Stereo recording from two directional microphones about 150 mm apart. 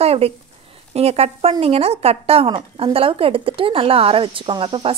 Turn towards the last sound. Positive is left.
turn(degrees=-35)  # may be behind; listen again after turning